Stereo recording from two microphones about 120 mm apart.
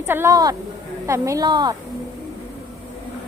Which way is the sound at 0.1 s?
20° right (ahead or behind).